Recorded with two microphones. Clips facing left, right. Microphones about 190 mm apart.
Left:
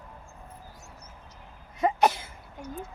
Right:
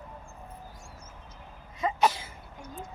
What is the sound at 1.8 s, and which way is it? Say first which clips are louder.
Cough: left 3 dB; 55° left (ahead or behind).